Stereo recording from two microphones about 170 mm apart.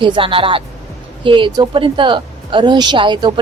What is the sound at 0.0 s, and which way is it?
A woman's voice, 30° right (ahead or behind).